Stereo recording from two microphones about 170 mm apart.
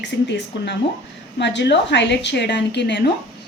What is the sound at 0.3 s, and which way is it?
A woman's voice, 90° left.